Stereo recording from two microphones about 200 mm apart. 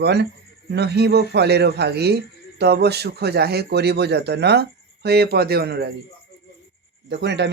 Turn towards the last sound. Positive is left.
turn(degrees=-55)  # may be behind; listen again after turning